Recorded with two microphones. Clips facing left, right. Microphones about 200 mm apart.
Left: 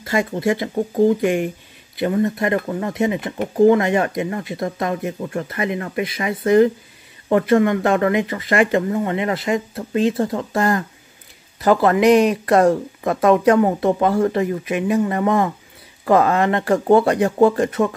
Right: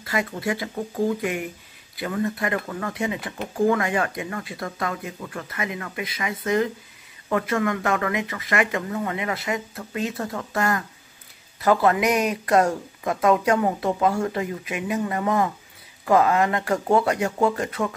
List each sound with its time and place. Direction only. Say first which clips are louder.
0.0 s speech: left 7 dB; 25° left (ahead or behind)